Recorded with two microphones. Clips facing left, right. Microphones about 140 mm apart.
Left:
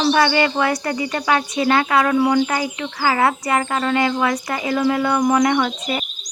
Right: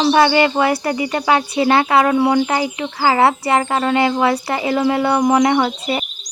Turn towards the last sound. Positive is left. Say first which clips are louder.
# right 3 dB
turn(degrees=-30)  # may be behind; listen again after turning